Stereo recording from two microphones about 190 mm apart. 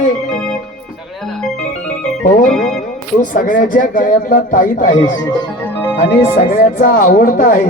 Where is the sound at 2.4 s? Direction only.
Centre (ahead or behind).